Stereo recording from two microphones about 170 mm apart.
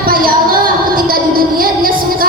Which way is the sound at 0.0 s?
55° right (ahead or behind).